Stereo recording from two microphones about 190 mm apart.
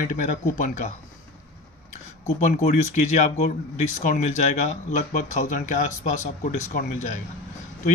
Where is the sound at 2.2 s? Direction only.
40° left (ahead or behind).